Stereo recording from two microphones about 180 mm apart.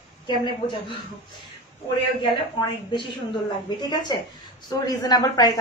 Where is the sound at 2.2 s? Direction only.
25° left (ahead or behind).